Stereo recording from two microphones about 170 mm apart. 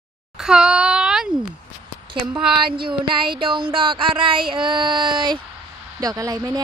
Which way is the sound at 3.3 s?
30° right (ahead or behind).